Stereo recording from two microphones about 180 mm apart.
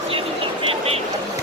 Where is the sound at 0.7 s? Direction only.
35° right (ahead or behind).